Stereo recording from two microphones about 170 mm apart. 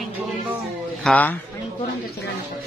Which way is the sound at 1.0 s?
10° left (ahead or behind).